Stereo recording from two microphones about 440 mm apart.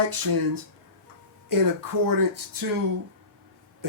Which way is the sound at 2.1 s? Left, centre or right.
Right.